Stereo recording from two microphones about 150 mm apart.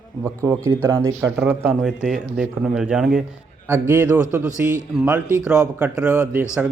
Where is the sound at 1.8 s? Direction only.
Centre (ahead or behind).